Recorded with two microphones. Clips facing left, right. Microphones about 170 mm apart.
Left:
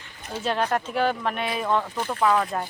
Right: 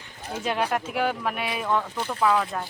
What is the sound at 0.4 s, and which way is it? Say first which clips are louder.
Speech: left 1 dB; 10° right (ahead or behind).